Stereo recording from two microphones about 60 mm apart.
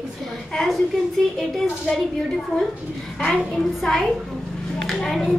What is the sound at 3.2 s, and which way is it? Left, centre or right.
Speech, centre.